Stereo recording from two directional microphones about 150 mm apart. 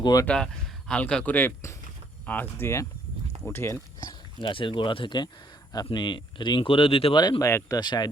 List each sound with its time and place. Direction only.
0.0 s speech: 25° left (ahead or behind)
0.3 s speech: 5° left (ahead or behind)
4.0 s speech: 30° left (ahead or behind)